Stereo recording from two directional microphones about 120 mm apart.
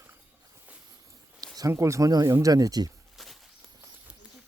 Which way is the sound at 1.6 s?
25° right (ahead or behind).